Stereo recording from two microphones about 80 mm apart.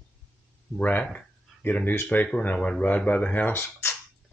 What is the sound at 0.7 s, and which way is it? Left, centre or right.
Speech, centre.